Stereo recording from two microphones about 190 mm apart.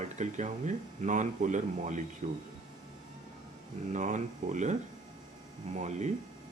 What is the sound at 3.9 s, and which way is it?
Speech, 40° right (ahead or behind).